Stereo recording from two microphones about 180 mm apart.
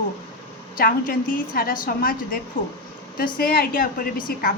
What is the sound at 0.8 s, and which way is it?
A woman's voice, 50° left (ahead or behind).